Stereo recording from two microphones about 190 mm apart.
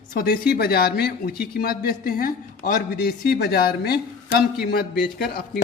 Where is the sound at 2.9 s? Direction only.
55° left (ahead or behind).